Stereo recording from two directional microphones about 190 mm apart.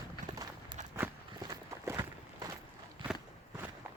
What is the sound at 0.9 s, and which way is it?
Walk, 15° right (ahead or behind).